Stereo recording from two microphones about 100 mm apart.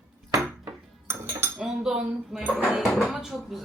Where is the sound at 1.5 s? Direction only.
5° right (ahead or behind).